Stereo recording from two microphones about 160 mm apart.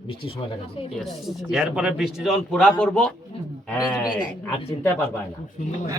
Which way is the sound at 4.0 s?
25° left (ahead or behind).